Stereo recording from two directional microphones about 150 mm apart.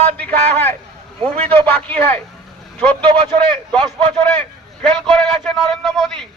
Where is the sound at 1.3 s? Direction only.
40° right (ahead or behind).